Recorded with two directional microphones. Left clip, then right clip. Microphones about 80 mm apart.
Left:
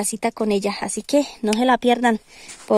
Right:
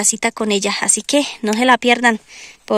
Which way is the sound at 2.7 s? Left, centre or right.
Centre.